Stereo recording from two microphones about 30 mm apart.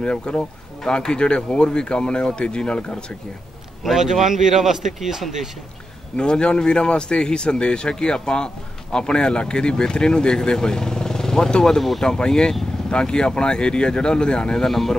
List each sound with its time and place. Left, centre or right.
0.0 s speech: left
3.9 s speech: centre
6.1 s speech: left
14.6 s speech: centre